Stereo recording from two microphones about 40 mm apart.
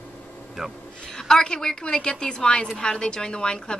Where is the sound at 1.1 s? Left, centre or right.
Centre.